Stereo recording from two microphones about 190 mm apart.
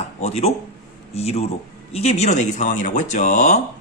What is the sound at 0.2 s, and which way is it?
A man's voice, 35° left (ahead or behind).